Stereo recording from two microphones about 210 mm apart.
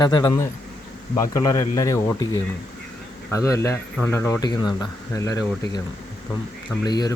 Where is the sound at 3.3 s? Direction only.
15° left (ahead or behind).